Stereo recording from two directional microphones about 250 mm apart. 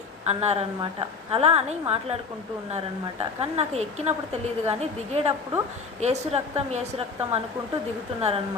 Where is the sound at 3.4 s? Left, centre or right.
Right.